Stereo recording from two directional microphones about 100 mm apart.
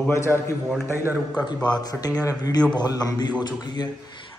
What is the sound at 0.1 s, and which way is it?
Speech, 30° left (ahead or behind).